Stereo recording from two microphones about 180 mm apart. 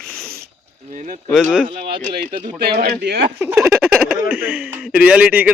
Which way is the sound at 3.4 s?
15° right (ahead or behind).